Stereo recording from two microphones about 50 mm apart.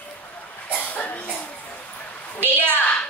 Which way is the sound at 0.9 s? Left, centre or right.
Left.